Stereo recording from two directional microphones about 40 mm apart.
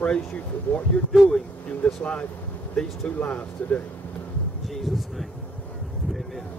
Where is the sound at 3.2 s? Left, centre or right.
Left.